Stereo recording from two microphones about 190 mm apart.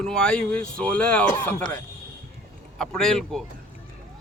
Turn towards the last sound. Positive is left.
turn(degrees=0)  # may be behind; listen again after turning